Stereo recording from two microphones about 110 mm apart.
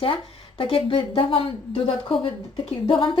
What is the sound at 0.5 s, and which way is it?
Speech, 55° left (ahead or behind).